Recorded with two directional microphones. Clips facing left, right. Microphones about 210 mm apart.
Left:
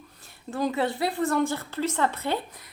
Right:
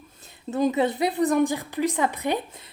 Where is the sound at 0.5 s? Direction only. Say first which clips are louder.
Right 4 dB; 20° right (ahead or behind).